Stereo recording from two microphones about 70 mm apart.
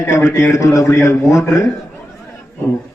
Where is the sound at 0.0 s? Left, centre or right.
Left.